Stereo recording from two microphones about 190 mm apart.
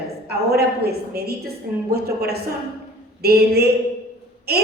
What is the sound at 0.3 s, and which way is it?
A woman's voice, 55° right (ahead or behind).